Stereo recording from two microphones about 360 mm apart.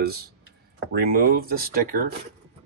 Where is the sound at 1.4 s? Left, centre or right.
Right.